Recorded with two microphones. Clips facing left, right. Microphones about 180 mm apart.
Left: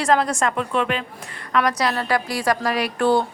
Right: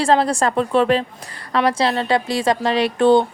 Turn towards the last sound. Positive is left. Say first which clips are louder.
# right 5 dB
turn(degrees=-20)  # may be behind; listen again after turning